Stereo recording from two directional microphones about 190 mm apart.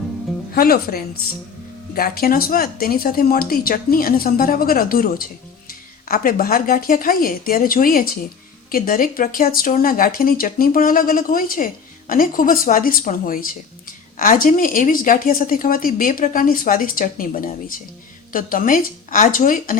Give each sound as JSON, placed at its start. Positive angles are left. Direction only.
{"t": 0.5, "sound": "speech", "side_deg": 50}